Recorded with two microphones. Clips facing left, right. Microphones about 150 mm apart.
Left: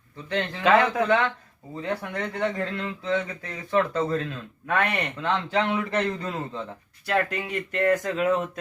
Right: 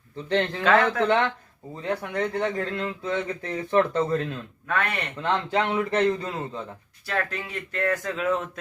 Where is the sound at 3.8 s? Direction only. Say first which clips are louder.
Right 1 dB; 25° right (ahead or behind).